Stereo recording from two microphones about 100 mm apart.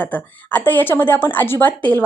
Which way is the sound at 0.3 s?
15° left (ahead or behind).